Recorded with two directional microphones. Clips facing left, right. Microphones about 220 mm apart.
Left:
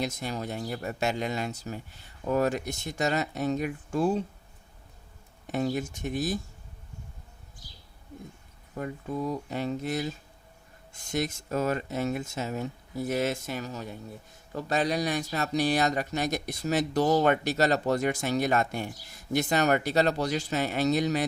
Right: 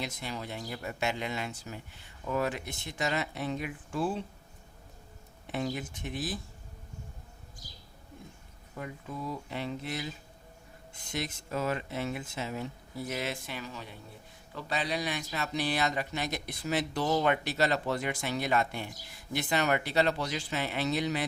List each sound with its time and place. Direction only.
0.0 s speech: 45° left (ahead or behind)
5.5 s speech: 45° left (ahead or behind)
8.8 s speech: 45° left (ahead or behind)